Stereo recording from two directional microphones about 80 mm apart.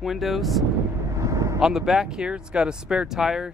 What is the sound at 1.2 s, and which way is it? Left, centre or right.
Vehicle, right.